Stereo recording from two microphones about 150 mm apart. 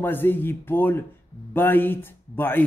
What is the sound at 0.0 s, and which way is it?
A man's voice, 15° left (ahead or behind).